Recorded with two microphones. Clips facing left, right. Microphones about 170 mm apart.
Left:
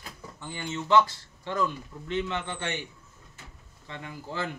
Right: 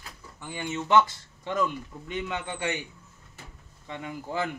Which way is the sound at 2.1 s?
10° right (ahead or behind).